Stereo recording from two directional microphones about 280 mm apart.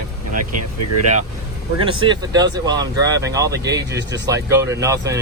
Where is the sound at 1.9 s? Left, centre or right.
Centre.